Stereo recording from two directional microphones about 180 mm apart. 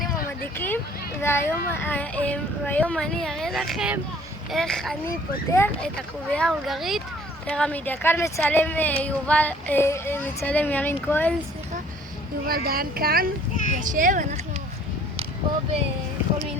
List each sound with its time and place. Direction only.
0.5 s a sound: 10° left (ahead or behind)
1.2 s speech: 15° left (ahead or behind)
12.5 s speech: 55° right (ahead or behind)